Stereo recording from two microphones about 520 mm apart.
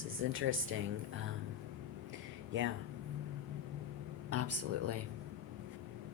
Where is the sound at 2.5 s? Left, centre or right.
Right.